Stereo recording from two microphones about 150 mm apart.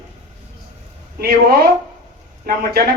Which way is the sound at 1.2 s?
80° right.